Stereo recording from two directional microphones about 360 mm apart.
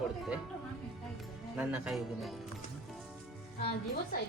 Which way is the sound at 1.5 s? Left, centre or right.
Centre.